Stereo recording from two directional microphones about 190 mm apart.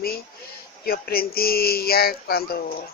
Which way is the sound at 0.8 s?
50° left (ahead or behind).